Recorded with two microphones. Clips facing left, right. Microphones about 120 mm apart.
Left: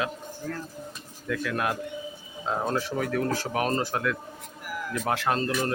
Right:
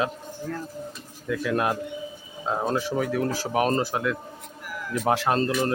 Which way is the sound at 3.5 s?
20° right (ahead or behind).